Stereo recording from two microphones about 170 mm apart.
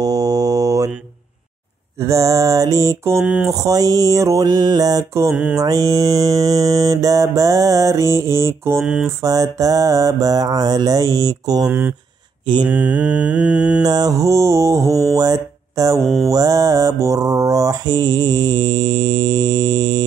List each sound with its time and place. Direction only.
0.0 s mantra: 20° right (ahead or behind)
2.0 s mantra: 20° right (ahead or behind)
3.2 s mantra: 5° right (ahead or behind)
3.5 s mantra: 20° right (ahead or behind)
5.3 s mantra: 5° right (ahead or behind)
5.6 s mantra: 20° right (ahead or behind)
8.8 s mantra: 5° right (ahead or behind)
9.2 s mantra: 20° right (ahead or behind)
13.8 s mantra: 20° right (ahead or behind)
15.1 s speech: 20° right (ahead or behind)
16.3 s mantra: 20° right (ahead or behind)